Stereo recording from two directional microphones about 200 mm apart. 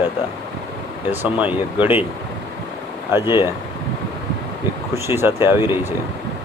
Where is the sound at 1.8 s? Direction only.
10° right (ahead or behind).